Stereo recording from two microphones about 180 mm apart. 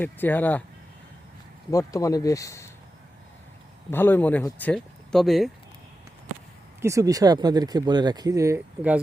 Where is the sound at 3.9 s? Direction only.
10° left (ahead or behind).